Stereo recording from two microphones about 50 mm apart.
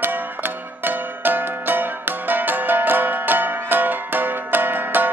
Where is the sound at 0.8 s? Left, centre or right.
Right.